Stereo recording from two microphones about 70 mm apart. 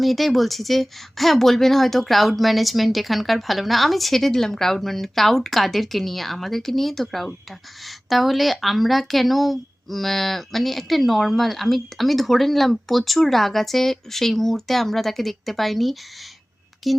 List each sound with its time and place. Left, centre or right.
0.0 s speech: centre